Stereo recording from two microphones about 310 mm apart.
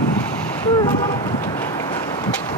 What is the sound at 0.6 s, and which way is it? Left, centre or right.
Vehicle, centre.